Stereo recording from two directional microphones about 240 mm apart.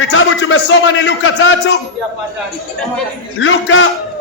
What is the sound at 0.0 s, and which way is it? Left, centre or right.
A man's voice, left.